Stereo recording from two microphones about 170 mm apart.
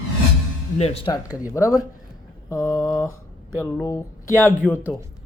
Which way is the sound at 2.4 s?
20° left (ahead or behind).